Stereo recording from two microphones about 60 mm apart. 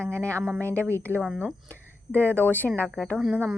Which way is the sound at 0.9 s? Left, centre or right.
Left.